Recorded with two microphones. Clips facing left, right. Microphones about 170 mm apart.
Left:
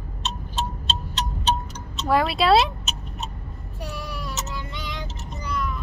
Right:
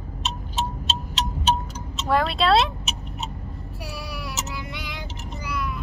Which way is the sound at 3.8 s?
10° right (ahead or behind).